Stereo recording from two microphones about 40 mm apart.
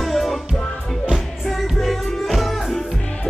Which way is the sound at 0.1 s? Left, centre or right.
Centre.